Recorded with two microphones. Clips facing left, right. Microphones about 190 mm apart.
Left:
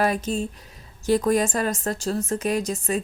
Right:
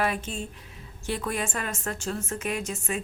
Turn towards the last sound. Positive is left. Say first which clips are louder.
# left 6 dB
turn(degrees=35)  # may be behind; listen again after turning